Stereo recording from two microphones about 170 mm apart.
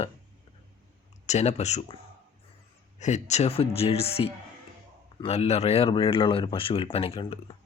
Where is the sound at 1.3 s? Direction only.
40° left (ahead or behind).